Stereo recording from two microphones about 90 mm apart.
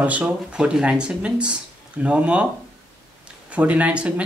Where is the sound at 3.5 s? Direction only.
15° right (ahead or behind).